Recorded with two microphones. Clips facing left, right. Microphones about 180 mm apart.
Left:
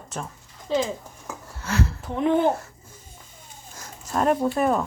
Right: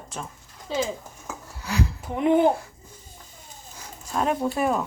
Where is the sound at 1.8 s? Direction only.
15° right (ahead or behind).